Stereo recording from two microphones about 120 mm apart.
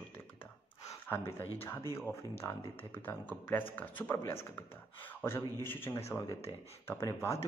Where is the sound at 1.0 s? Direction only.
20° left (ahead or behind).